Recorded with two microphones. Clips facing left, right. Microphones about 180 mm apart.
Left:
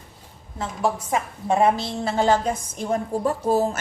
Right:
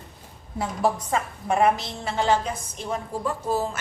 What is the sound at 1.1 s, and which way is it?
Speech, 15° left (ahead or behind).